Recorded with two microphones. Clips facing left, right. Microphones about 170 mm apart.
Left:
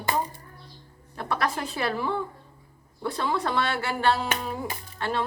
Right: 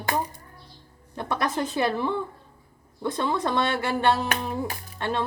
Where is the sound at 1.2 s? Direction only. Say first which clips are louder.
Right 2 dB; 20° right (ahead or behind).